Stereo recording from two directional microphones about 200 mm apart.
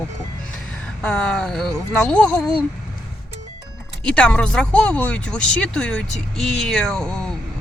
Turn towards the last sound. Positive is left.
turn(degrees=5)  # may be behind; listen again after turning